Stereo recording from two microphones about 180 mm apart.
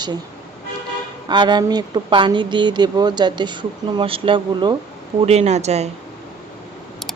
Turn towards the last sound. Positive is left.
turn(degrees=-35)  # may be behind; listen again after turning